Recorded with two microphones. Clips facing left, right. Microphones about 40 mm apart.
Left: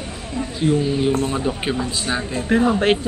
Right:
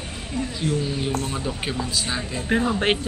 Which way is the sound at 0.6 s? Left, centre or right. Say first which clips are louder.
Left 9 dB; centre.